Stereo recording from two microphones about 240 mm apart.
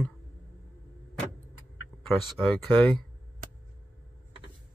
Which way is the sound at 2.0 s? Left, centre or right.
Centre.